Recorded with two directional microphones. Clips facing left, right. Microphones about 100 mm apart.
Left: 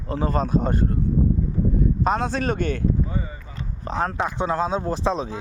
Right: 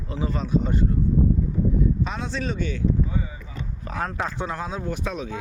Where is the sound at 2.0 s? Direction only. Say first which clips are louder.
Left 6 dB; 45° left (ahead or behind).